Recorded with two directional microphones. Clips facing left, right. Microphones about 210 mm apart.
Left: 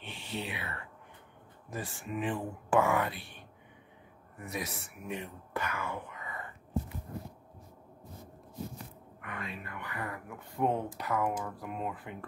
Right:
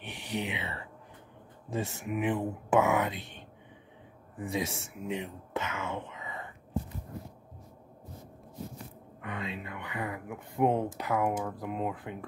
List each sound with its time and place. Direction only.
0.0 s speech: 15° right (ahead or behind)
5.5 s wail: 25° right (ahead or behind)
9.2 s speech: 20° right (ahead or behind)